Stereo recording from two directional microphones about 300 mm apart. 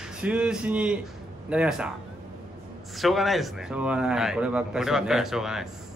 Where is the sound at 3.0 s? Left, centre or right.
Centre.